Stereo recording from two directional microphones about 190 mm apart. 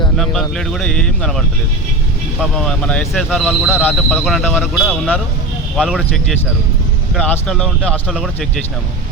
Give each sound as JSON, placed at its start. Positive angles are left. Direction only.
{"t": 0.2, "sound": "speech", "side_deg": 0}